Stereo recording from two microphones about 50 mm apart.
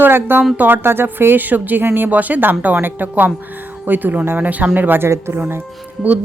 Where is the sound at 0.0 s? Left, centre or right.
Right.